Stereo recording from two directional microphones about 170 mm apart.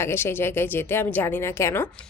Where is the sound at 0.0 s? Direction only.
15° left (ahead or behind).